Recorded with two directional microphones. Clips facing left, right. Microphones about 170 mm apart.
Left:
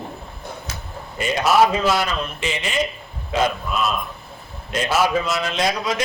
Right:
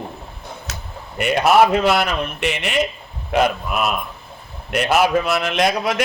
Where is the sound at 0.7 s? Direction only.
65° right (ahead or behind).